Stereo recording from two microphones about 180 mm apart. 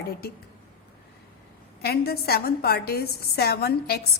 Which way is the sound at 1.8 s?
60° left (ahead or behind).